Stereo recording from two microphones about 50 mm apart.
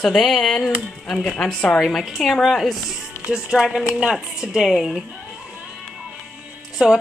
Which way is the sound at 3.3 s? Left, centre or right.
Centre.